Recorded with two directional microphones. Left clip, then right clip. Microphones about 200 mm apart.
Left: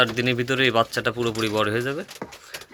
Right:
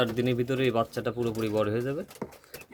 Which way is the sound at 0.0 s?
15° right (ahead or behind).